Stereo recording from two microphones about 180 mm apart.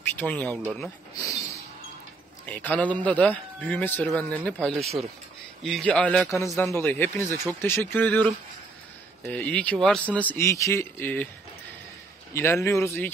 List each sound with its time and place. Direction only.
0.0 s speech: 10° left (ahead or behind)
2.4 s a man's voice: 10° left (ahead or behind)
6.4 s a man's voice: 15° left (ahead or behind)
7.2 s speech: 20° right (ahead or behind)
7.6 s a man's voice: 10° left (ahead or behind)
12.4 s a man's voice: 15° left (ahead or behind)